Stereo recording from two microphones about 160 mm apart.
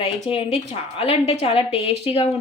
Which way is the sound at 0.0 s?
35° left (ahead or behind).